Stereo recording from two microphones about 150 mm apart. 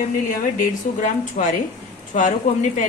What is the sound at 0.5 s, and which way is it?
A woman's voice, 55° left (ahead or behind).